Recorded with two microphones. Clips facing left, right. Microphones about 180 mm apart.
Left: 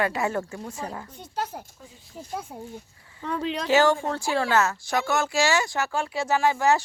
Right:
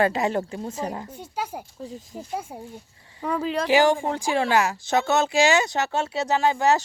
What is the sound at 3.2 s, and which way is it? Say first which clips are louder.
Speech: right 3 dB; 5° right (ahead or behind).